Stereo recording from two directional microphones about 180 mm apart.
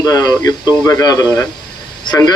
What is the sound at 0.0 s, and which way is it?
Speech, 20° left (ahead or behind).